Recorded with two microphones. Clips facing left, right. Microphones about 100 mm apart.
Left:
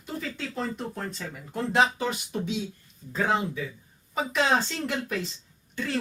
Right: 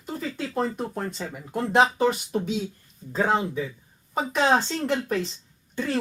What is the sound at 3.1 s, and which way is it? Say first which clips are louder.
Speech: right 3 dB; 35° right (ahead or behind).